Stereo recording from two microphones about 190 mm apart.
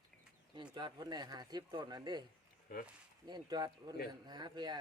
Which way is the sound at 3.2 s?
20° right (ahead or behind).